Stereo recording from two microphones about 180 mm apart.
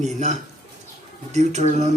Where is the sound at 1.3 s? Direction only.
40° right (ahead or behind).